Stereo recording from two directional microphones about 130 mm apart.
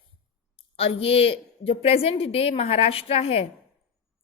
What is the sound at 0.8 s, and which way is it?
A woman's voice, 50° left (ahead or behind).